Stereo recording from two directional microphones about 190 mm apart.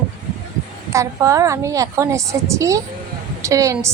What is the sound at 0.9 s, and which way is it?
A woman's voice, 15° right (ahead or behind).